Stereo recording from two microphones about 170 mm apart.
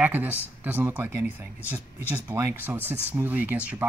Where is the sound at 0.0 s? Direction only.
10° right (ahead or behind).